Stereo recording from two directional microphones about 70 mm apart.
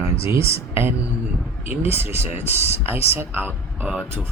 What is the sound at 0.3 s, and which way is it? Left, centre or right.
Speech, right.